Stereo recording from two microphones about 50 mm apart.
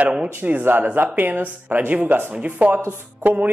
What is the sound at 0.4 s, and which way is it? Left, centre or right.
Speech, right.